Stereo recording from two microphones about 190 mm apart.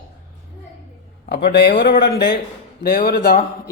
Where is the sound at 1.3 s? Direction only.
60° left (ahead or behind).